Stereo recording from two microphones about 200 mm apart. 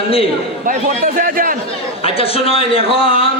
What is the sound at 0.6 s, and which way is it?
Speech, 45° right (ahead or behind).